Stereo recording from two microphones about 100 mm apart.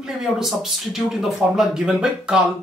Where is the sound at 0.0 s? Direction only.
5° right (ahead or behind).